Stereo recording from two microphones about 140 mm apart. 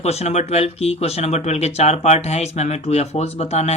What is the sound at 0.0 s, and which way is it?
Speech, 50° left (ahead or behind).